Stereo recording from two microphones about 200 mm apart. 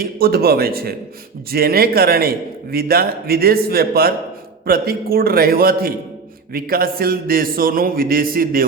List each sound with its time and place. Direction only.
0.0 s a man's voice: 50° right (ahead or behind)